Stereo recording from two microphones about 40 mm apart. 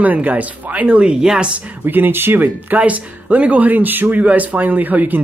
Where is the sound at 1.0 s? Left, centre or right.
Right.